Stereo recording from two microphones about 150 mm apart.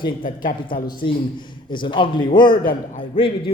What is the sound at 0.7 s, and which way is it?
Speech, 35° left (ahead or behind).